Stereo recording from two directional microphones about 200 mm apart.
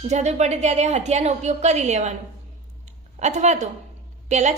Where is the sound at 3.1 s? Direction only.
35° right (ahead or behind).